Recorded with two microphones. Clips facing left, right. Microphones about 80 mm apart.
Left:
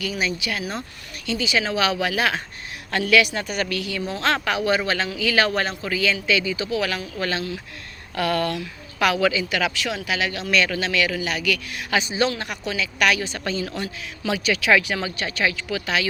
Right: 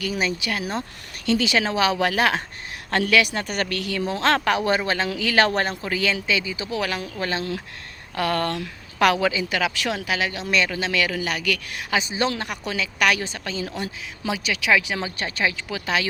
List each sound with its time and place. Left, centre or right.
0.0 s a man's voice: right
3.4 s a man's voice: right
6.7 s a man's voice: right
9.1 s a man's voice: right
11.9 s a man's voice: right
13.6 s a man's voice: centre
14.9 s speech: right